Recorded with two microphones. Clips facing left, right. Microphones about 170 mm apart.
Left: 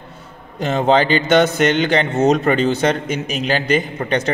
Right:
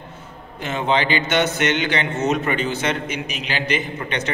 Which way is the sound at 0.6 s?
40° left (ahead or behind).